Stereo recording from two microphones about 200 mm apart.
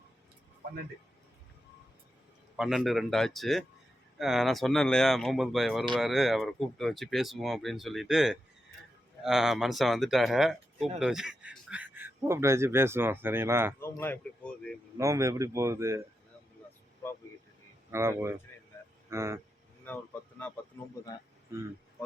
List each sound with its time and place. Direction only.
2.6 s speech: centre (ahead or behind)
13.7 s speech: 10° left (ahead or behind)
14.9 s speech: 15° right (ahead or behind)
17.9 s speech: 15° right (ahead or behind)
19.9 s speech: 10° left (ahead or behind)
21.5 s speech: 15° right (ahead or behind)